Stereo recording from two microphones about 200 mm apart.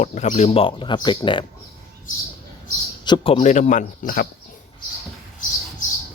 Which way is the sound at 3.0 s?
25° left (ahead or behind).